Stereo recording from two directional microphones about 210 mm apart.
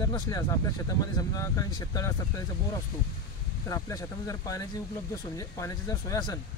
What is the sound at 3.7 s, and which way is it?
Speech, 15° left (ahead or behind).